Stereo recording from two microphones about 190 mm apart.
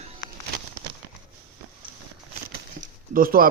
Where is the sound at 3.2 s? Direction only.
50° right (ahead or behind).